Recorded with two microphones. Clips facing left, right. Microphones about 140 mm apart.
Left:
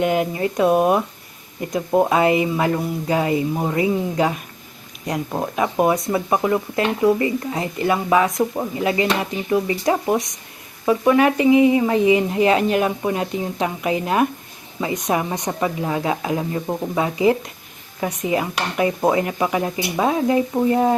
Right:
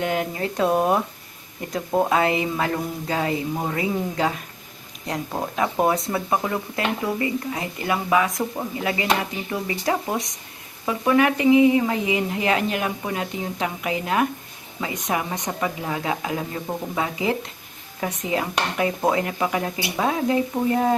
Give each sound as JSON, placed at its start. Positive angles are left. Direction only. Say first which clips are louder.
{"t": 0.0, "sound": "speech", "louder": "left 5 dB", "side_deg": 20}
{"t": 3.5, "sound": "speech", "louder": "left 5 dB", "side_deg": 10}
{"t": 6.1, "sound": "speech", "louder": "left 5 dB", "side_deg": 20}